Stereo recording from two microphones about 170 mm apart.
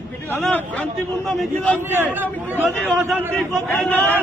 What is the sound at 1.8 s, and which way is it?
A man's voice, 10° right (ahead or behind).